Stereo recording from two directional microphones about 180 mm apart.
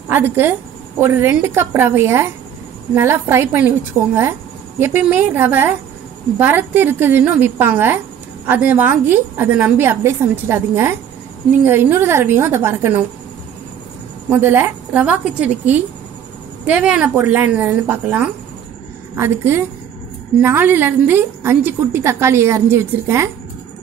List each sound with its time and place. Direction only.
0.1 s a woman's voice: 10° right (ahead or behind)
14.3 s a woman's voice: 10° right (ahead or behind)